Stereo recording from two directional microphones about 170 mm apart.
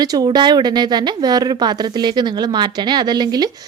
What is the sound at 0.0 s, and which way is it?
A woman's voice, 20° right (ahead or behind).